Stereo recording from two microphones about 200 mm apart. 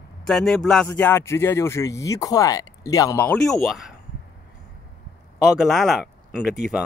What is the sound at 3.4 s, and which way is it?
Speech, centre (ahead or behind).